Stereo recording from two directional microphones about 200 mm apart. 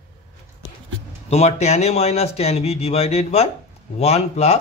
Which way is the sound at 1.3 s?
35° left (ahead or behind).